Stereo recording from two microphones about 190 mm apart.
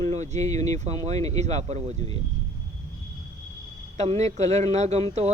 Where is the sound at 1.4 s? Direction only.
35° right (ahead or behind).